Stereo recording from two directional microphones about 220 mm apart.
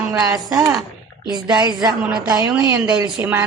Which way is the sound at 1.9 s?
5° right (ahead or behind).